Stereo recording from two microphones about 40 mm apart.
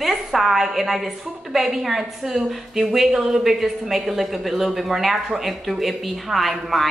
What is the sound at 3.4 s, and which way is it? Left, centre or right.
A woman's voice, centre.